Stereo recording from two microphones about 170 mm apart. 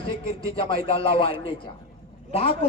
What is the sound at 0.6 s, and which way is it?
Speech, 30° left (ahead or behind).